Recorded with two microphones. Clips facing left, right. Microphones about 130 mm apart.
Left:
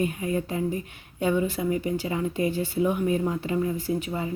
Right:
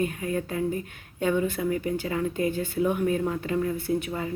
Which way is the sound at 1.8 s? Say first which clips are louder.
Even; 50° right (ahead or behind).